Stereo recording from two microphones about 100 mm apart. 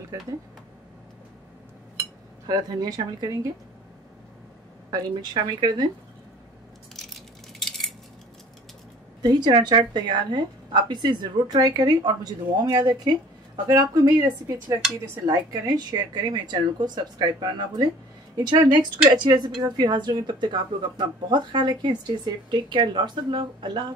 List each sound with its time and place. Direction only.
2.4 s a woman's voice: 45° right (ahead or behind)
4.9 s a woman's voice: 45° right (ahead or behind)
7.1 s a sound: centre (ahead or behind)
9.2 s a woman's voice: 45° right (ahead or behind)
15.2 s a woman's voice: 40° right (ahead or behind)